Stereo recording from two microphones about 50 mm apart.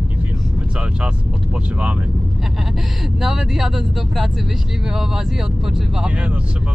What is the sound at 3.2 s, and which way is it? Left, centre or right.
Speech, centre.